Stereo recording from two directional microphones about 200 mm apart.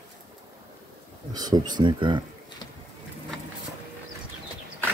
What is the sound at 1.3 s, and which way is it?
Speech, 20° right (ahead or behind).